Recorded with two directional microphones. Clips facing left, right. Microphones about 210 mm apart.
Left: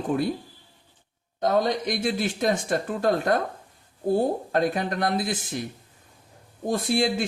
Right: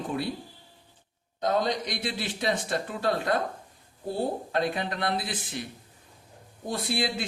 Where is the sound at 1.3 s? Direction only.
50° left (ahead or behind).